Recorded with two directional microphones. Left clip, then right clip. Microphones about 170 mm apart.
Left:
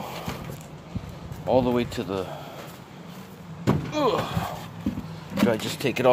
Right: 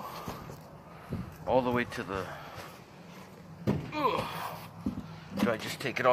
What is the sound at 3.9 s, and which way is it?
Speech, 25° left (ahead or behind).